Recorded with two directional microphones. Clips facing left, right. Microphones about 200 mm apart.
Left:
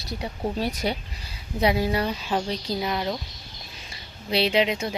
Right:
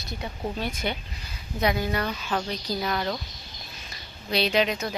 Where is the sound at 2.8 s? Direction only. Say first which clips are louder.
Even; 15° left (ahead or behind).